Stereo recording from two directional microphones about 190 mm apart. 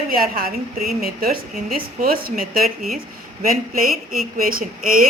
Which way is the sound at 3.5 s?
50° right (ahead or behind).